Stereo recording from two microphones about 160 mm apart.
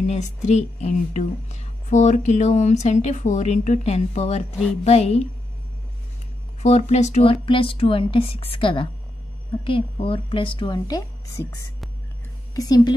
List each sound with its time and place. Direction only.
0.0 s a woman's voice: 45° left (ahead or behind)
6.6 s speech: 45° left (ahead or behind)
7.4 s a woman's voice: 35° left (ahead or behind)